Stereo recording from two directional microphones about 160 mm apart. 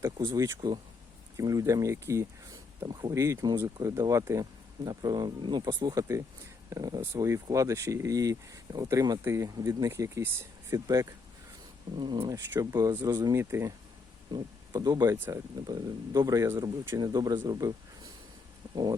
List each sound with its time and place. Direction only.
0.3 s speech: 25° right (ahead or behind)
14.3 s speech: 25° right (ahead or behind)
17.5 s a sound: 25° right (ahead or behind)